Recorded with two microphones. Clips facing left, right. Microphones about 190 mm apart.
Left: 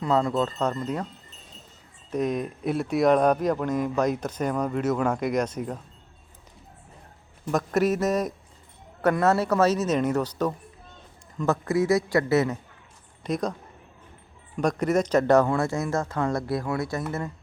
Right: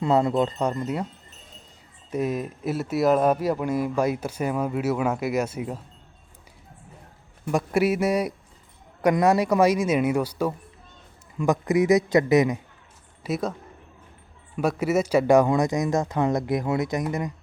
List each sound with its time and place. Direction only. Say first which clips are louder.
0.0 s speech: right 2 dB; 25° right (ahead or behind)
2.1 s speech: even; 5° right (ahead or behind)
7.5 s speech: right 1 dB; 10° right (ahead or behind)
13.2 s speech: even; 5° right (ahead or behind)